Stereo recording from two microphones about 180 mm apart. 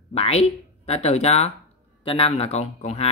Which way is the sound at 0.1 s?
35° left (ahead or behind).